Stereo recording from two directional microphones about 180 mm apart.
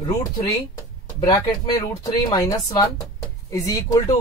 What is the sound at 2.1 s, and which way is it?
Speech, 20° left (ahead or behind).